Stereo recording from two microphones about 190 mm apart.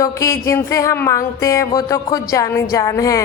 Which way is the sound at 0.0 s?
15° left (ahead or behind).